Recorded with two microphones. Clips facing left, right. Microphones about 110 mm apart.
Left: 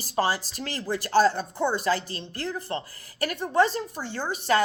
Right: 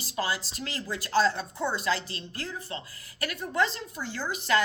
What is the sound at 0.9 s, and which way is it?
Speech, 45° left (ahead or behind).